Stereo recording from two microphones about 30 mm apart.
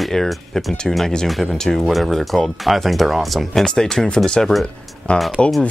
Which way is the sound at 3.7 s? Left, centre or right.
Centre.